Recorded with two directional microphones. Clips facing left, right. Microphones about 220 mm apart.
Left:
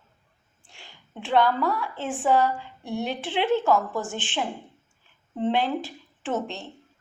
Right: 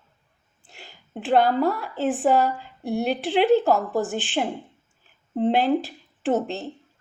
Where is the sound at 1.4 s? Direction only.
40° right (ahead or behind).